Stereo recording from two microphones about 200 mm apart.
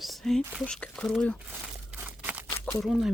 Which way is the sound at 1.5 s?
5° right (ahead or behind).